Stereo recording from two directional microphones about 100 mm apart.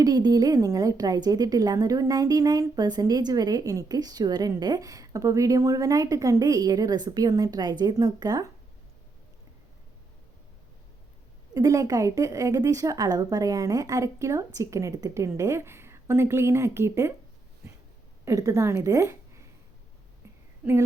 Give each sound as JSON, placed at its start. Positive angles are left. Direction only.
{"t": 0.0, "sound": "a woman's voice", "side_deg": -40}
{"t": 11.5, "sound": "a woman's voice", "side_deg": -35}
{"t": 18.3, "sound": "a woman's voice", "side_deg": -30}